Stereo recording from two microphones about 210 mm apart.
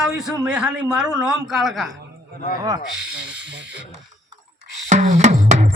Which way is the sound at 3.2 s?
5° right (ahead or behind).